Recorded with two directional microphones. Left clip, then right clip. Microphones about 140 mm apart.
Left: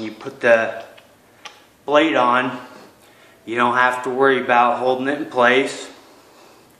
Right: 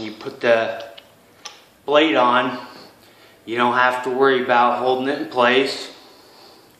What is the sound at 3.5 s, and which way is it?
Speech, 35° left (ahead or behind).